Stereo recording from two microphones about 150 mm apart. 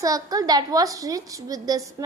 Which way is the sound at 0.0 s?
25° right (ahead or behind).